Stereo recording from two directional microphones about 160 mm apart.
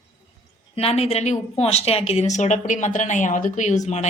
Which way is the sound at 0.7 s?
40° left (ahead or behind).